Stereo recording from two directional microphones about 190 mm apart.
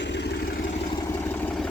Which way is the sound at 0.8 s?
20° left (ahead or behind).